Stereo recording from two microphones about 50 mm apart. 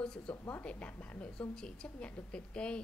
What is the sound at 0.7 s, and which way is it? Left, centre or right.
A woman's voice, left.